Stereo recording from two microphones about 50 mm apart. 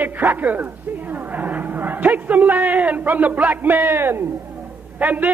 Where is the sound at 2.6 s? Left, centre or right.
Right.